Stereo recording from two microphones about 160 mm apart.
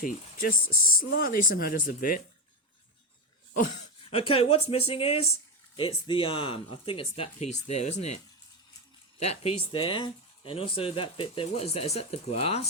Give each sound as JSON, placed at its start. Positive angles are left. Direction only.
{"t": 0.0, "sound": "speech", "side_deg": 55}
{"t": 4.0, "sound": "speech", "side_deg": 35}